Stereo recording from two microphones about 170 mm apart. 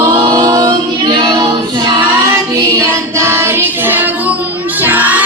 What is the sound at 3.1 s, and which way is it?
Child singing, 15° right (ahead or behind).